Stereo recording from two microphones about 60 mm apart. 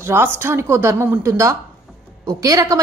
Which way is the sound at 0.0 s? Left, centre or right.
Right.